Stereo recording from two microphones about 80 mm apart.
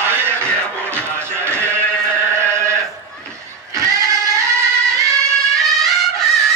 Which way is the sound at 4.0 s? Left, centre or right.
Right.